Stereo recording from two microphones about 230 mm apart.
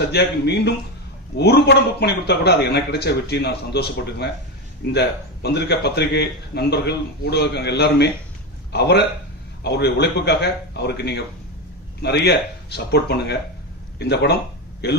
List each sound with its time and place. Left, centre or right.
0.1 s a man's voice: left